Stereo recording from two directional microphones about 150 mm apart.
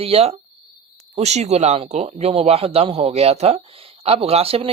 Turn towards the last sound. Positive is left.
turn(degrees=-40)  # may be behind; listen again after turning